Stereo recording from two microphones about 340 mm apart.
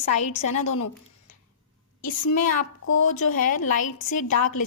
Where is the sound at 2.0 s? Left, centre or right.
Left.